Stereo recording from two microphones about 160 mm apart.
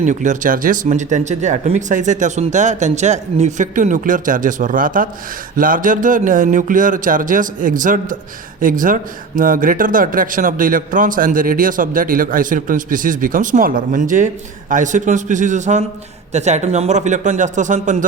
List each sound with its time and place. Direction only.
0.0 s speech: 50° right (ahead or behind)